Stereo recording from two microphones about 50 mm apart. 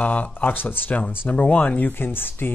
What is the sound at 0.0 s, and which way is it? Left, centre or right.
Speech, left.